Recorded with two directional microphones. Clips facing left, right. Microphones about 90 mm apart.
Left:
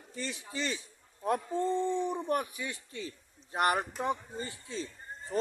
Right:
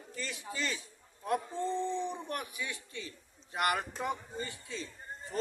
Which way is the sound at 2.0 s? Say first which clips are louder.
Left 6 dB; 40° left (ahead or behind).